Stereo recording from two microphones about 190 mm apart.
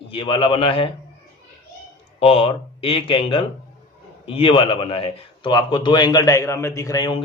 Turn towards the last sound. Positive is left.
turn(degrees=20)  # may be behind; listen again after turning